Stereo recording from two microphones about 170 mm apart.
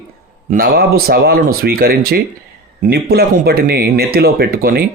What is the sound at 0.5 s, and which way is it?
Speech, 65° right (ahead or behind).